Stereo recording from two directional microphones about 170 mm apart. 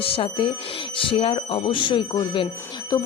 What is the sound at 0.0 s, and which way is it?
Speech, 35° left (ahead or behind).